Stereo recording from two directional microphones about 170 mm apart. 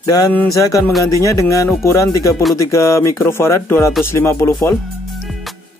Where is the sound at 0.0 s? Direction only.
20° left (ahead or behind).